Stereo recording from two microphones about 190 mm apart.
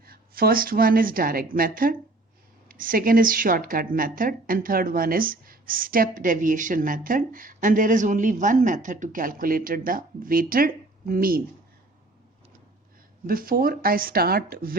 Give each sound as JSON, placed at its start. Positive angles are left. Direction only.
{"t": 0.0, "sound": "a woman's voice", "side_deg": -50}
{"t": 13.2, "sound": "a woman's voice", "side_deg": -50}